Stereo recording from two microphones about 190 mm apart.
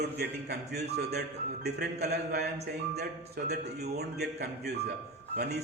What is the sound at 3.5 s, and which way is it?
A man's voice, 60° right (ahead or behind).